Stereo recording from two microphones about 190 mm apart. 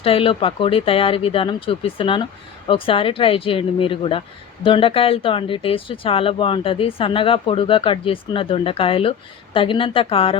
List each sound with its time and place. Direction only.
0.0 s speech: 30° left (ahead or behind)